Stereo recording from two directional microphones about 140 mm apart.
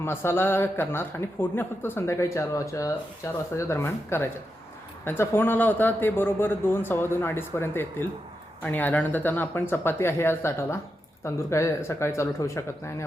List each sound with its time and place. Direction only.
0.0 s speech: 15° left (ahead or behind)